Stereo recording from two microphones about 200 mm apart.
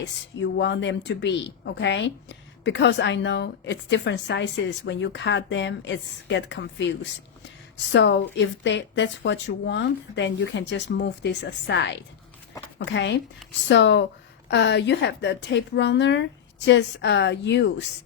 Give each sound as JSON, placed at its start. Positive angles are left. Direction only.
{"t": 0.0, "sound": "a woman's voice", "side_deg": 60}
{"t": 7.9, "sound": "a woman's voice", "side_deg": 60}